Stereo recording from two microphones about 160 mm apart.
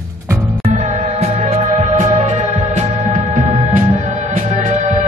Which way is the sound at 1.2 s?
45° right (ahead or behind).